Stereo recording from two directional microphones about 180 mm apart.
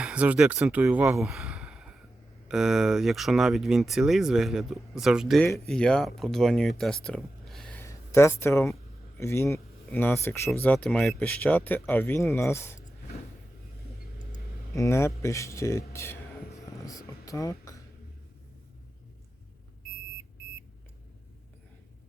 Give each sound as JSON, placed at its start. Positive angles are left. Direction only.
{"t": 0.0, "sound": "speech", "side_deg": -5}
{"t": 7.8, "sound": "a sound", "side_deg": 15}
{"t": 9.1, "sound": "speech", "side_deg": 15}
{"t": 14.8, "sound": "speech", "side_deg": 15}
{"t": 17.2, "sound": "beatboxing", "side_deg": 15}